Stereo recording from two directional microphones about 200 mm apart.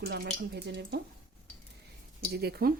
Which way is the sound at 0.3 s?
60° right (ahead or behind).